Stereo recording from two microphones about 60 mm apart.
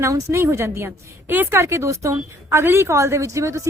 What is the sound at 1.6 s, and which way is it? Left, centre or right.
A woman's voice, right.